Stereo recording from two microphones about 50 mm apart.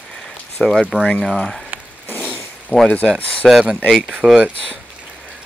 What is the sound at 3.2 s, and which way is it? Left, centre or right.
Speech, left.